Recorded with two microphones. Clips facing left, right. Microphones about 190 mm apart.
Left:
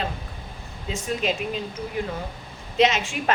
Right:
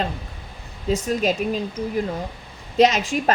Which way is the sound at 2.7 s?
40° right (ahead or behind).